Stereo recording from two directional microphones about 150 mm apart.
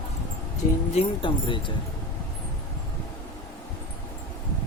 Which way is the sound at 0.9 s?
40° left (ahead or behind).